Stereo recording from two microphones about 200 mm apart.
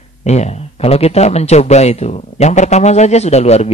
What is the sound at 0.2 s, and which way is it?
Speech, 35° left (ahead or behind).